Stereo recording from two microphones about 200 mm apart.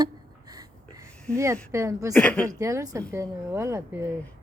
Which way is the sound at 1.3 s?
15° right (ahead or behind).